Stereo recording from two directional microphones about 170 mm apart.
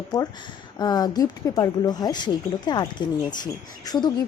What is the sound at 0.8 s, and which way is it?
Speech, 25° left (ahead or behind).